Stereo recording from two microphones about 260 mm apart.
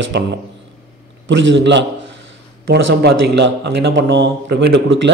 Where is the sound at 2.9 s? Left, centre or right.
Right.